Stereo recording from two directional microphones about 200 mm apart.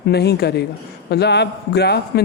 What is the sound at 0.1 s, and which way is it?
A man's voice, 55° left (ahead or behind).